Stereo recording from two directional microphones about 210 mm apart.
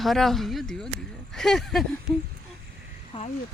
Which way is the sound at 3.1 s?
25° left (ahead or behind).